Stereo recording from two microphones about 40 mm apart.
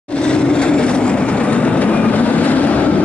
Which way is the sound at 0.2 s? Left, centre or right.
Left.